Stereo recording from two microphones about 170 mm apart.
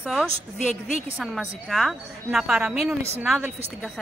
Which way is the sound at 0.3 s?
45° left (ahead or behind).